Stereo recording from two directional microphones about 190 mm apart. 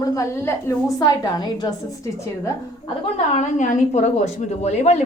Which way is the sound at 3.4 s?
40° left (ahead or behind).